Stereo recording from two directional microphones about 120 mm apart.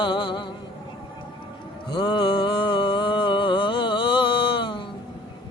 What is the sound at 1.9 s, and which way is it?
Music, 40° left (ahead or behind).